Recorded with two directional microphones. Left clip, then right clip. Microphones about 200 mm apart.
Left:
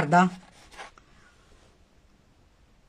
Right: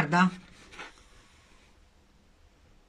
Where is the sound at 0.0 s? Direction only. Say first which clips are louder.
Left 4 dB; 35° left (ahead or behind).